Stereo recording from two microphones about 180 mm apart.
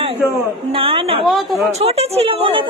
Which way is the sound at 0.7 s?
30° right (ahead or behind).